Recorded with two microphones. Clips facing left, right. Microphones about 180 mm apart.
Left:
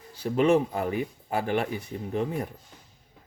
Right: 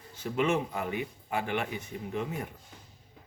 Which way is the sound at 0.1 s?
35° left (ahead or behind).